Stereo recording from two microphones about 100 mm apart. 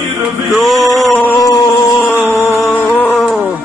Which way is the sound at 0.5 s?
Centre (ahead or behind).